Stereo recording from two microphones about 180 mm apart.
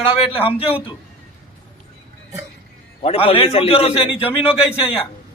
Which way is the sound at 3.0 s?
30° left (ahead or behind).